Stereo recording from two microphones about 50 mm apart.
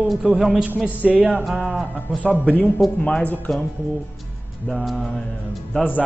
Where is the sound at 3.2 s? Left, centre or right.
Left.